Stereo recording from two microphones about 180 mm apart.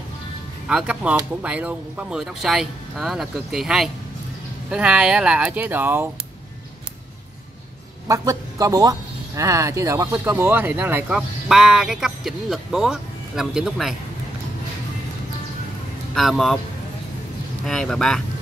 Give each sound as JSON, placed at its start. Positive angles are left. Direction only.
{"t": 0.7, "sound": "speech", "side_deg": -5}
{"t": 8.1, "sound": "speech", "side_deg": -20}
{"t": 16.2, "sound": "speech", "side_deg": 0}
{"t": 17.6, "sound": "speech", "side_deg": 5}